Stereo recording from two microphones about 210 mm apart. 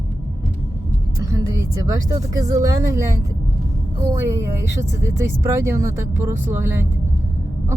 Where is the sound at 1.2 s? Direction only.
15° right (ahead or behind).